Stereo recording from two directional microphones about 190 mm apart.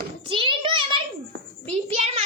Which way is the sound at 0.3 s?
25° right (ahead or behind).